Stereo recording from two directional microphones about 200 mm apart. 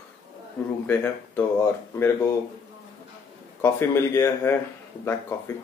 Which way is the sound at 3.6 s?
10° left (ahead or behind).